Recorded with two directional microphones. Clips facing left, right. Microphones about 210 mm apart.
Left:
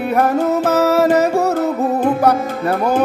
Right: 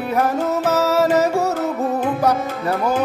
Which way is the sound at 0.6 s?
60° left (ahead or behind).